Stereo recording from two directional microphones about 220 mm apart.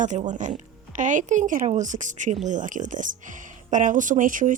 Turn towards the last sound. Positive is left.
turn(degrees=-35)  # may be behind; listen again after turning